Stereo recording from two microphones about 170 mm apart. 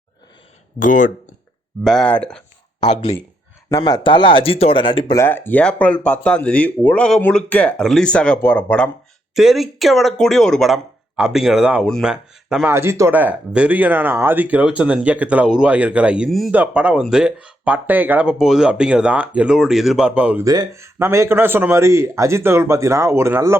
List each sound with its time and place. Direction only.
0.8 s speech: 50° left (ahead or behind)
1.8 s speech: centre (ahead or behind)
2.8 s speech: 30° left (ahead or behind)
5.1 s speech: 15° left (ahead or behind); by 12.7 s 5° right (ahead or behind)
12.7 s speech: 15° right (ahead or behind)
20.4 s speech: 20° right (ahead or behind)